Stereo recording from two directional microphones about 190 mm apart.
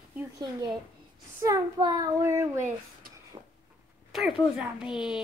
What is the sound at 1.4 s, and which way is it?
A child's voice, 20° right (ahead or behind).